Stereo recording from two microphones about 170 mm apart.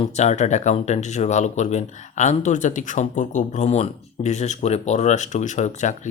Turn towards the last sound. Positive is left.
turn(degrees=45)  # may be behind; listen again after turning